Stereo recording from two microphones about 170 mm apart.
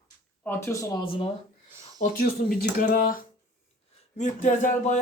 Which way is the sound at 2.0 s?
55° left (ahead or behind).